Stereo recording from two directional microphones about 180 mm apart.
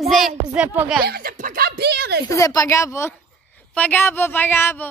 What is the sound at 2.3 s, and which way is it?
Speech, 20° left (ahead or behind).